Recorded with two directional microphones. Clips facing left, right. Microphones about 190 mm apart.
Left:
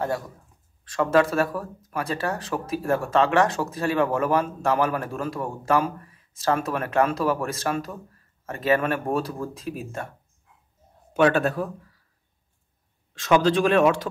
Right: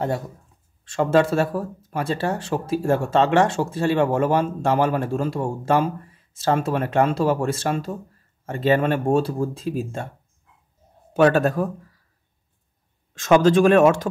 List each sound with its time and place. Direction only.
0.8 s speech: 25° right (ahead or behind)
11.1 s speech: 40° right (ahead or behind)
13.1 s speech: 45° right (ahead or behind)